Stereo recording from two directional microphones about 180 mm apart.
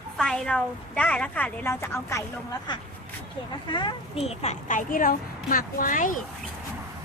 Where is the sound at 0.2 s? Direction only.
Centre (ahead or behind).